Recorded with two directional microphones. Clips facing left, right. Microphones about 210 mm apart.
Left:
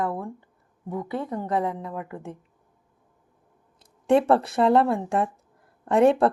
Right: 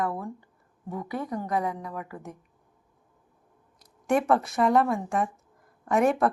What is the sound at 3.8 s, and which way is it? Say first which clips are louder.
Speech: left 5 dB; 30° left (ahead or behind).